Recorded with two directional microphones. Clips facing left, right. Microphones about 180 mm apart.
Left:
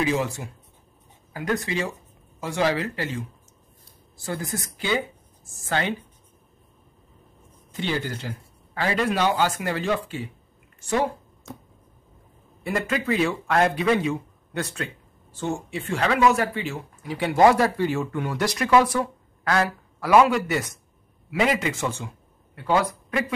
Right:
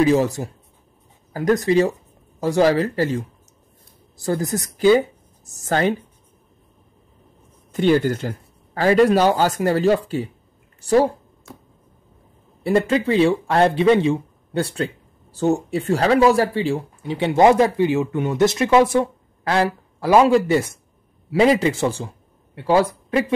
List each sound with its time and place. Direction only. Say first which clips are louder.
0.0 s a woman's voice: right 8 dB; 40° right (ahead or behind)
7.7 s speech: right 11 dB; 50° right (ahead or behind)
12.6 s speech: right 7 dB; 30° right (ahead or behind)